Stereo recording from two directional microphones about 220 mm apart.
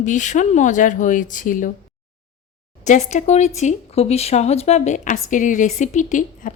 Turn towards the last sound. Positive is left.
turn(degrees=35)  # may be behind; listen again after turning